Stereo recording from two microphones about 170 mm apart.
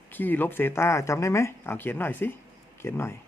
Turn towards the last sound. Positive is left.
turn(degrees=15)  # may be behind; listen again after turning